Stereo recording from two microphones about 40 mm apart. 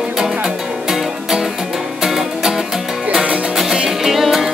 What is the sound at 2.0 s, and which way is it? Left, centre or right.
Music, centre.